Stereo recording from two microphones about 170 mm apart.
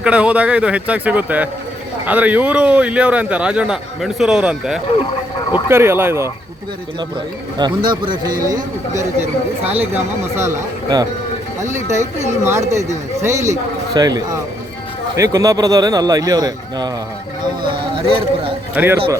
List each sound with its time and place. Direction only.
0.0 s a man's voice: 5° right (ahead or behind)
7.6 s speech: 25° right (ahead or behind)
8.1 s speech: 55° right (ahead or behind)
9.9 s a man's voice: 15° right (ahead or behind); by 18.5 s 30° right (ahead or behind)
18.7 s a man's voice: 10° right (ahead or behind)